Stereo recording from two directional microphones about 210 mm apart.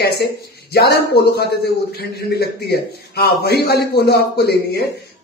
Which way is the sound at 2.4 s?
50° left (ahead or behind).